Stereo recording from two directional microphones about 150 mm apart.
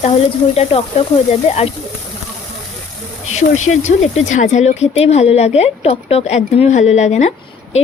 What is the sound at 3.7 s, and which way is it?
Speech, 50° left (ahead or behind).